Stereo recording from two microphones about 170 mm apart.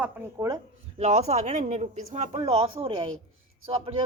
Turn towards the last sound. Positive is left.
turn(degrees=-35)  # may be behind; listen again after turning